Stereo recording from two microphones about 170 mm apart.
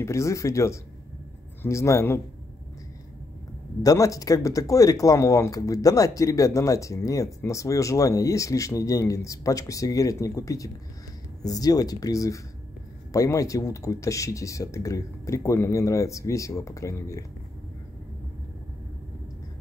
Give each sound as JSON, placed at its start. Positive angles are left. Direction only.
{"t": 0.0, "sound": "speech", "side_deg": 15}
{"t": 3.8, "sound": "speech", "side_deg": 20}